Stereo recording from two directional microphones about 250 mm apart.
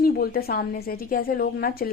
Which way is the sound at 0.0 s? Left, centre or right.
Left.